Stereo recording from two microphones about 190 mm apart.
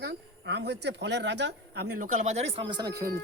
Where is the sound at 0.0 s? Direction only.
65° right (ahead or behind).